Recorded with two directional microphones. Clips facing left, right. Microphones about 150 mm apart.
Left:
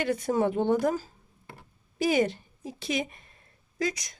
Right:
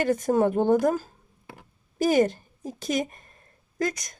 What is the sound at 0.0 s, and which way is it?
A woman's voice, 45° right (ahead or behind).